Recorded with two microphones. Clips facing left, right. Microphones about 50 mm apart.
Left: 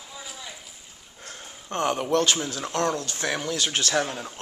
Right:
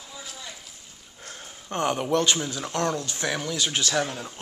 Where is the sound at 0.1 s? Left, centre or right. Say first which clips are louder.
Left 1 dB; centre.